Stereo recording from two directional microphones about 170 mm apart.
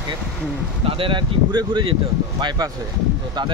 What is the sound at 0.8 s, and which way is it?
Speech, 30° right (ahead or behind).